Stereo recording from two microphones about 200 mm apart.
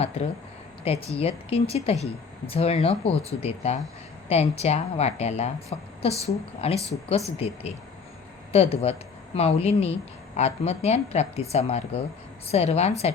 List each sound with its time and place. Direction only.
0.0 s speech: 30° left (ahead or behind)